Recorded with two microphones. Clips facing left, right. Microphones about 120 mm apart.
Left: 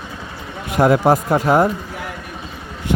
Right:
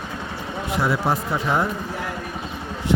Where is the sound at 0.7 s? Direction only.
55° left (ahead or behind).